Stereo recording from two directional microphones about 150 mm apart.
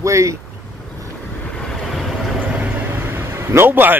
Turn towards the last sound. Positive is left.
turn(degrees=-15)  # may be behind; listen again after turning